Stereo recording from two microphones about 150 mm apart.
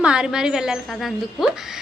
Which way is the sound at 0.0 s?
5° right (ahead or behind).